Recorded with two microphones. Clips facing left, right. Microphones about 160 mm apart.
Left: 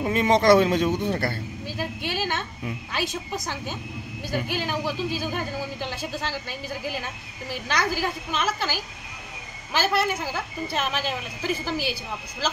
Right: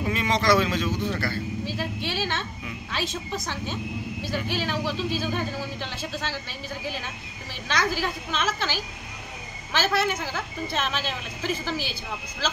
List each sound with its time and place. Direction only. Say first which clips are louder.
0.1 s speech: left 5 dB; 50° left (ahead or behind)
1.1 s speech: left 2 dB; 25° left (ahead or behind)
1.8 s a sound: left 5 dB; 15° left (ahead or behind)
2.9 s a woman's voice: even; 15° left (ahead or behind)
7.6 s a woman's voice: even; 10° left (ahead or behind)